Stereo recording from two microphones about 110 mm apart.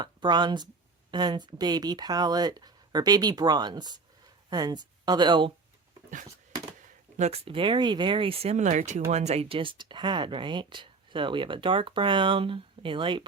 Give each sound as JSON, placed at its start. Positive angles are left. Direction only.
{"t": 0.0, "sound": "speech", "side_deg": -40}
{"t": 7.2, "sound": "speech", "side_deg": -70}